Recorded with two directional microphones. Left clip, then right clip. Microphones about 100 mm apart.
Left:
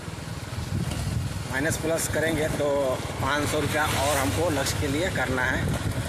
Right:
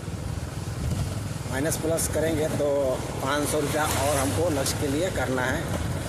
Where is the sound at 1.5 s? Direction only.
15° right (ahead or behind).